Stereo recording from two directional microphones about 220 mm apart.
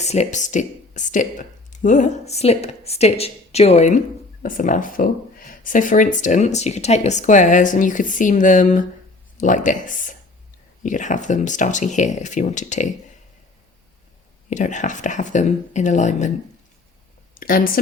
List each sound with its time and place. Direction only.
0.0 s speech: 30° left (ahead or behind)
14.5 s speech: 35° left (ahead or behind)
17.4 s speech: 40° left (ahead or behind)